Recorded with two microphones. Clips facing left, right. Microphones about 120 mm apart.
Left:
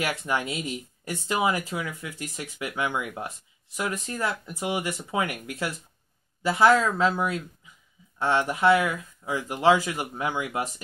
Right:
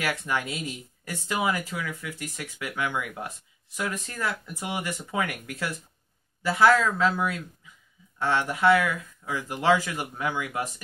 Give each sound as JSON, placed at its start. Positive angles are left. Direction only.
{"t": 0.0, "sound": "speech", "side_deg": 20}